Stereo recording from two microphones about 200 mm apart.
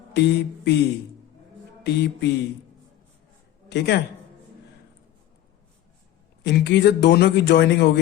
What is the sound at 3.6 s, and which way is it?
Speech, 60° left (ahead or behind).